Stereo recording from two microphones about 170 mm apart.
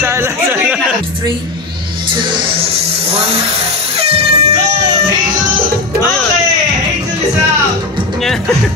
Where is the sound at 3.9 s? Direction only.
35° right (ahead or behind).